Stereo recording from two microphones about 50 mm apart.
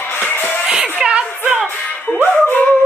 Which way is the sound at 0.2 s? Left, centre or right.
Left.